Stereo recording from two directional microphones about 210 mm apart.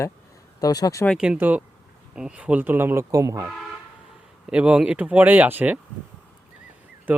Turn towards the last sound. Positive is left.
turn(degrees=-5)  # may be behind; listen again after turning